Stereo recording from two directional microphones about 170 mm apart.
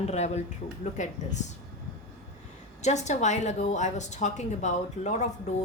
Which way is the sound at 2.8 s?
45° left (ahead or behind).